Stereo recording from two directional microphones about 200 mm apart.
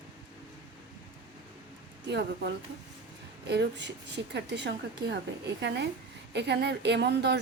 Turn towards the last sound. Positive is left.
turn(degrees=-60)  # may be behind; listen again after turning